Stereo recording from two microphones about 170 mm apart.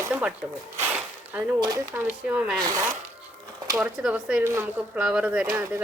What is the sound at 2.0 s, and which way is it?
Speech, 10° right (ahead or behind).